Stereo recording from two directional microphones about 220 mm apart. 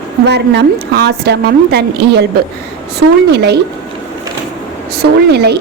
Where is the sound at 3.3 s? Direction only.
50° right (ahead or behind).